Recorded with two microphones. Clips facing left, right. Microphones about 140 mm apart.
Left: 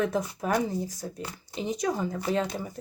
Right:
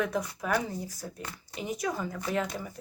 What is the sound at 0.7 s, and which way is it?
Speech, 20° left (ahead or behind).